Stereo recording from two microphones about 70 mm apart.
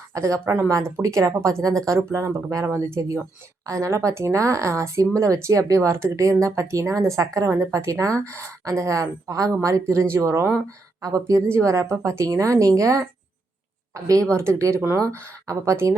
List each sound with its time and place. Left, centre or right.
0.1 s speech: right
7.3 s speech: right
11.0 s a woman's voice: right
11.6 s speech: right